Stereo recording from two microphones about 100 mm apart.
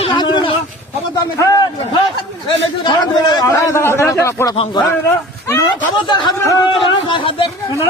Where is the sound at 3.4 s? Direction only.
30° left (ahead or behind).